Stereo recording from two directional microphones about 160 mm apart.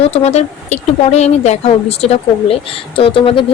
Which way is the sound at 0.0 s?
40° left (ahead or behind).